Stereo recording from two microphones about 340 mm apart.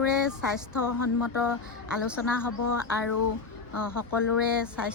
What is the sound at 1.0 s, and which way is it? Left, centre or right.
Speech, left.